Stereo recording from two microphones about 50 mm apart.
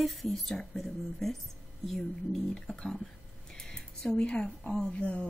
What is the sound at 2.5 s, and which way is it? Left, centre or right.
Speech, centre.